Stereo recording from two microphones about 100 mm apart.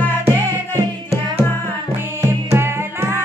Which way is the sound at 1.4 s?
20° left (ahead or behind).